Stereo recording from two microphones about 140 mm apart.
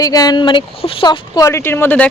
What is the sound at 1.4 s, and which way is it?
Speech, 20° left (ahead or behind).